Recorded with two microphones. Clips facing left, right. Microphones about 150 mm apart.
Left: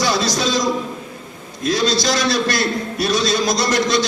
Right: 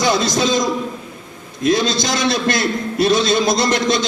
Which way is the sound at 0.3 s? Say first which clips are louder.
Right 2 dB; 20° right (ahead or behind).